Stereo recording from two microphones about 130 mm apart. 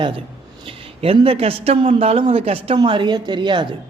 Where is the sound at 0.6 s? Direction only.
45° right (ahead or behind).